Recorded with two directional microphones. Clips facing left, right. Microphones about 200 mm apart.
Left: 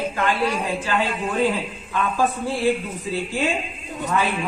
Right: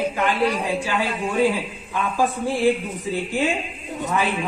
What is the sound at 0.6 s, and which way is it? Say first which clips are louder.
A man's voice: even; 10° right (ahead or behind).